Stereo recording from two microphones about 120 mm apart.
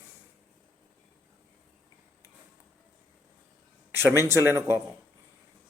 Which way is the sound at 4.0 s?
20° right (ahead or behind).